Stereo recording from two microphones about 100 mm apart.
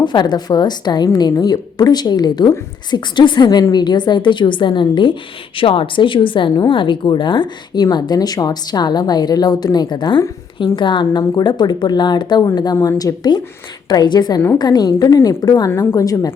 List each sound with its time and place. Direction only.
0.0 s a woman's voice: 50° left (ahead or behind)